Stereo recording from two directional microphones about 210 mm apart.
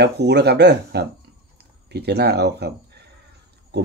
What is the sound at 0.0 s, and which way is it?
Speech, 50° right (ahead or behind).